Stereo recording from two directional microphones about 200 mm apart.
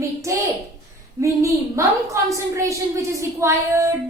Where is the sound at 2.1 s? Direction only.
15° right (ahead or behind).